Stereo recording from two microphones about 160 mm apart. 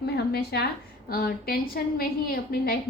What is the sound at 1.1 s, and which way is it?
A woman's voice, 70° left (ahead or behind).